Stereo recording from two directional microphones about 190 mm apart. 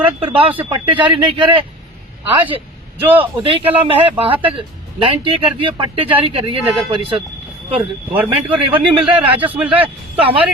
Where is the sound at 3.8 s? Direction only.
30° right (ahead or behind).